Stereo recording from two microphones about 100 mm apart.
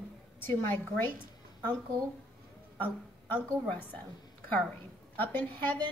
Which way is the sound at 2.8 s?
20° left (ahead or behind).